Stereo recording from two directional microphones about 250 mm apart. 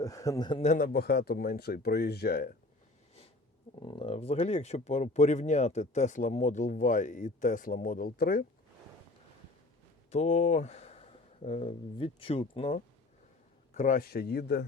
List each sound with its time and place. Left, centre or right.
0.0 s a man's voice: centre
0.7 s speech: left
3.8 s speech: centre; by 8.4 s left
10.1 s speech: left